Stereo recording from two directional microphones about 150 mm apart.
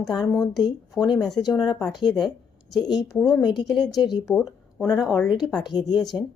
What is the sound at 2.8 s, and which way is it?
Speech, 30° left (ahead or behind).